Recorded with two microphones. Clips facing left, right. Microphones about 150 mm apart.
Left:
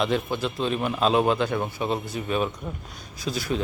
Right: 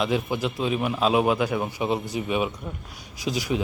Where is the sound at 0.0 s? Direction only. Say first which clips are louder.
Even; 10° right (ahead or behind).